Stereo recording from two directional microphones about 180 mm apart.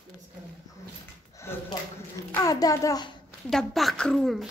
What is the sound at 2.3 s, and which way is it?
Speech, 20° left (ahead or behind).